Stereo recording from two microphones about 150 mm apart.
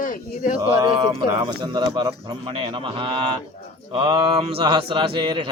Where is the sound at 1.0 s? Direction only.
30° right (ahead or behind).